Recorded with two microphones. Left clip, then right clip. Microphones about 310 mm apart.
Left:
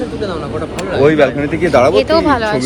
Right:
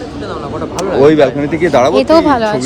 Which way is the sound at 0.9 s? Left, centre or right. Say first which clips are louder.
Right 2 dB; right.